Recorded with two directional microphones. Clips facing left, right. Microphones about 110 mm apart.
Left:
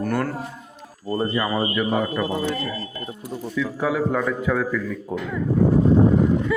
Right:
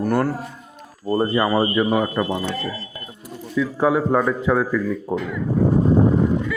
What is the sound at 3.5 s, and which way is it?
Speech, 30° right (ahead or behind).